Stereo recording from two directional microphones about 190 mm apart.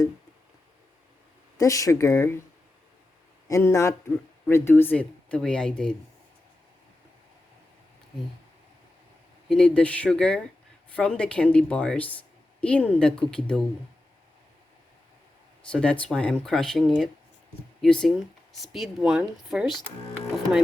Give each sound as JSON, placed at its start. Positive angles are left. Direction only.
{"t": 1.5, "sound": "speech", "side_deg": 15}
{"t": 3.5, "sound": "speech", "side_deg": 15}
{"t": 9.5, "sound": "a woman's voice", "side_deg": 5}
{"t": 15.7, "sound": "a woman's voice", "side_deg": 5}